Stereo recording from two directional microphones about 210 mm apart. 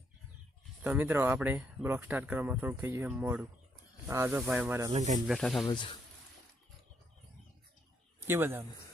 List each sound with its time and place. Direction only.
0.9 s speech: 10° right (ahead or behind)
4.4 s speech: 5° right (ahead or behind)
4.9 s speech: 35° right (ahead or behind)
5.3 s speech: centre (ahead or behind)
5.6 s speech: 20° left (ahead or behind)
8.3 s speech: 10° right (ahead or behind)